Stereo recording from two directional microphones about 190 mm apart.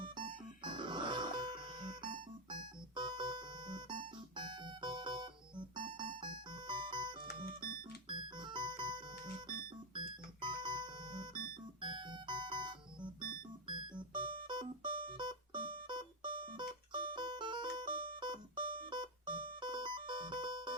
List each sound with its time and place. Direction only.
0.0 s music: 25° right (ahead or behind)
9.9 s keyboard: 25° right (ahead or behind)
13.7 s music: 25° right (ahead or behind)